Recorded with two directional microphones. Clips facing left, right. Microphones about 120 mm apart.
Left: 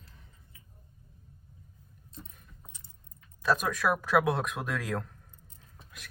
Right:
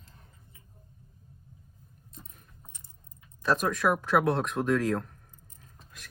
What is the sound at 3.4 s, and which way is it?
Speech, centre (ahead or behind).